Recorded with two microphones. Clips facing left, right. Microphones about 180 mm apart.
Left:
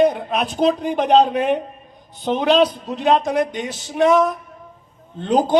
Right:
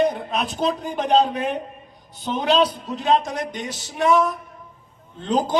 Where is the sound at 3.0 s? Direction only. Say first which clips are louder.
Left 4 dB; 45° left (ahead or behind).